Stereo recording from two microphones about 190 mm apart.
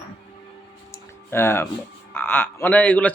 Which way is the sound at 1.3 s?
10° left (ahead or behind).